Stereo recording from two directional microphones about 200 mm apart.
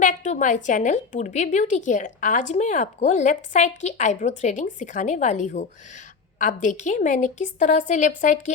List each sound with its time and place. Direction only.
0.0 s a woman's voice: 40° left (ahead or behind)